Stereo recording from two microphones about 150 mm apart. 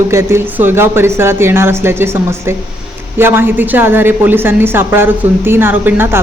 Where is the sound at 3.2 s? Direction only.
15° right (ahead or behind).